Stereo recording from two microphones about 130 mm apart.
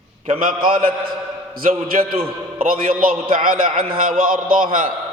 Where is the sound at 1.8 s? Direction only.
50° right (ahead or behind).